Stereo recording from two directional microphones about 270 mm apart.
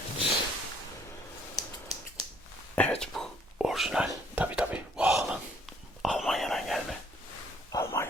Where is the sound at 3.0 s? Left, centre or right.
Centre.